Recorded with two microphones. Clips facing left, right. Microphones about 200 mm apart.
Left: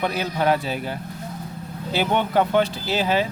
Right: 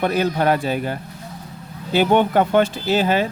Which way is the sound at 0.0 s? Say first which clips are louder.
Right 4 dB; 50° right (ahead or behind).